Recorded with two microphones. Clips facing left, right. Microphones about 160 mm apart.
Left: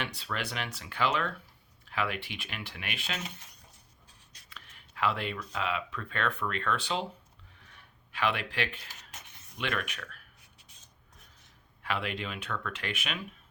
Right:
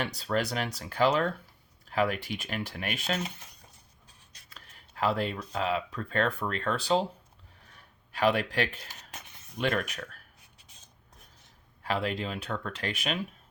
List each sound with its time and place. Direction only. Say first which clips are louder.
0.0 s speech: right 7 dB; 40° right (ahead or behind)
4.4 s speech: left 1 dB; 40° right (ahead or behind)
7.7 s a sound: right 2 dB; 40° right (ahead or behind)
9.6 s speech: right 5 dB; 40° right (ahead or behind)
11.8 s speech: right 4 dB; 35° right (ahead or behind)